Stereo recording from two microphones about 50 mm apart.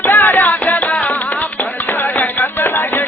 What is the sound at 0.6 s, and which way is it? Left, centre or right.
Music, left.